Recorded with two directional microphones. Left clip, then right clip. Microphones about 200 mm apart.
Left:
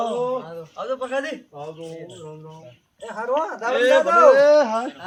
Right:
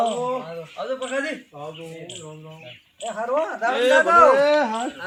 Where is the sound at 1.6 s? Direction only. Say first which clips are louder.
Left 1 dB; centre (ahead or behind).